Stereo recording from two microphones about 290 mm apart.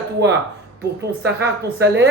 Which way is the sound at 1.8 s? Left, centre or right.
Right.